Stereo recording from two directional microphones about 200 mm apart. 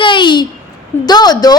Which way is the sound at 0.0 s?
25° left (ahead or behind).